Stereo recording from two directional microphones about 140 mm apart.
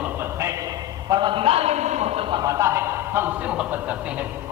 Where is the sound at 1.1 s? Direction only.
35° right (ahead or behind).